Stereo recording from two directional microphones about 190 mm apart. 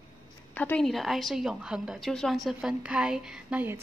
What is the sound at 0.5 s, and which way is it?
A woman's voice, 5° left (ahead or behind).